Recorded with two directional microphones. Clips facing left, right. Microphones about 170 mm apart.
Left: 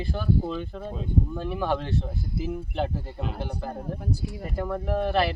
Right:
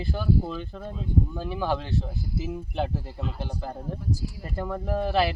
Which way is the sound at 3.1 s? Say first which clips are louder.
Left 1 dB; 60° left (ahead or behind).